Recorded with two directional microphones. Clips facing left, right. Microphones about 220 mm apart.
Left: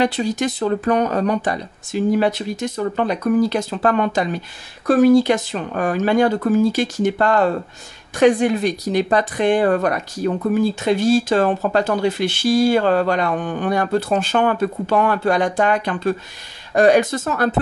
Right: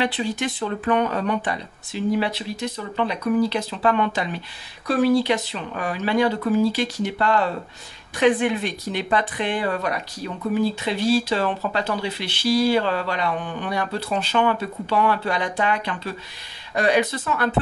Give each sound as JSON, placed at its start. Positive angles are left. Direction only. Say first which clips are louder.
{"t": 0.0, "sound": "speech", "louder": "left 5 dB", "side_deg": 40}